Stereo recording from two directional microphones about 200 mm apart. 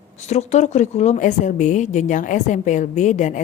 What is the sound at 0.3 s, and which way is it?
Speech, 35° left (ahead or behind).